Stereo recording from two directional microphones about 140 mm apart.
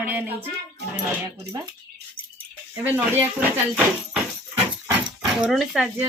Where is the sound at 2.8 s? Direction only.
15° right (ahead or behind).